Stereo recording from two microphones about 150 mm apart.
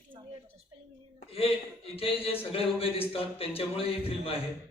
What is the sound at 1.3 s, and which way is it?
A man's voice, 40° left (ahead or behind).